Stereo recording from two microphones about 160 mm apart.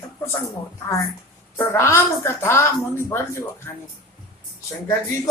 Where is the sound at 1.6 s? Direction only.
15° left (ahead or behind).